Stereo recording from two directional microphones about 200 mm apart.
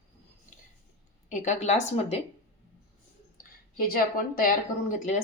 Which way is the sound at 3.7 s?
45° left (ahead or behind).